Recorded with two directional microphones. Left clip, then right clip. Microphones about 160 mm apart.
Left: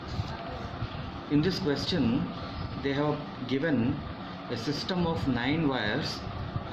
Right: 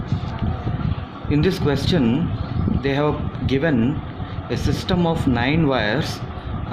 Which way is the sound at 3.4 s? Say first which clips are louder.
Right 9 dB; 70° right (ahead or behind).